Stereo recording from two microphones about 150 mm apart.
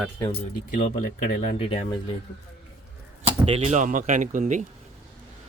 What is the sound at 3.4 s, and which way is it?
Speech, 45° right (ahead or behind).